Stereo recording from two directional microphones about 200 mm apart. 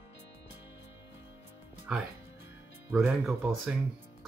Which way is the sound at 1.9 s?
5° right (ahead or behind).